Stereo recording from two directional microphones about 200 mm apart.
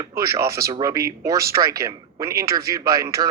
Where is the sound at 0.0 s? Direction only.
15° right (ahead or behind).